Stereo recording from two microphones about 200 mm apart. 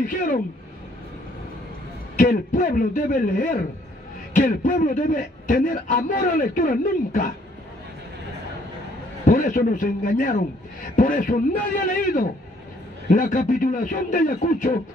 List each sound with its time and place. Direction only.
0.0 s speech: 40° left (ahead or behind)
2.1 s a man's voice: 40° left (ahead or behind)
9.2 s a man's voice: 40° left (ahead or behind)